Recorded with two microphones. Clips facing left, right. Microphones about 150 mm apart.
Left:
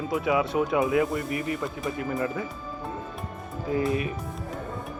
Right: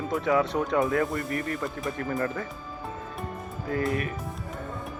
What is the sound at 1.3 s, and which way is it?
Speech, 20° left (ahead or behind).